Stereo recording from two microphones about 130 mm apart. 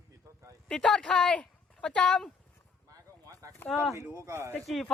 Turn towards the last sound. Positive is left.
turn(degrees=0)  # may be behind; listen again after turning